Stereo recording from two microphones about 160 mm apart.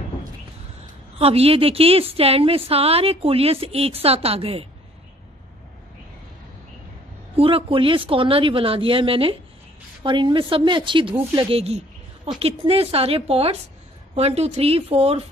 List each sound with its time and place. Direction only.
1.1 s a woman's voice: 40° right (ahead or behind)
7.3 s a woman's voice: 35° right (ahead or behind)